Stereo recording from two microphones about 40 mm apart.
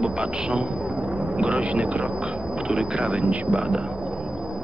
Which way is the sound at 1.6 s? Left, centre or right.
Right.